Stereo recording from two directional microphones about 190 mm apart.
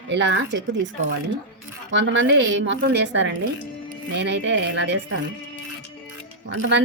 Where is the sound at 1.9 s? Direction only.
75° right (ahead or behind).